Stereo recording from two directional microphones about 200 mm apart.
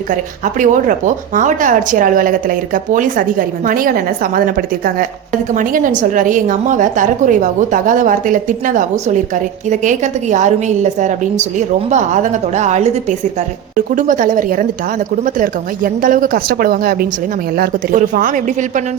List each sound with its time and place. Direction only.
0.1 s a woman's voice: 40° right (ahead or behind)